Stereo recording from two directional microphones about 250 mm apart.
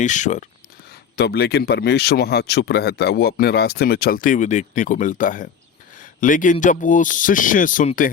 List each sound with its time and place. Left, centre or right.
0.0 s speech: left
1.1 s speech: left